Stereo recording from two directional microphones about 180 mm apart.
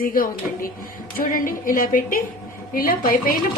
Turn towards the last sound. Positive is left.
turn(degrees=50)  # may be behind; listen again after turning